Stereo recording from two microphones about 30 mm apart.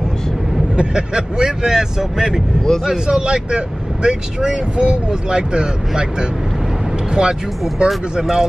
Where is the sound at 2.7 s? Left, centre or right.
Centre.